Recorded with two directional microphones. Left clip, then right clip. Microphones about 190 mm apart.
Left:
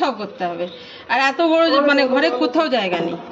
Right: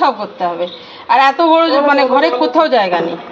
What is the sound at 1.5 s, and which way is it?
Speech, 20° left (ahead or behind).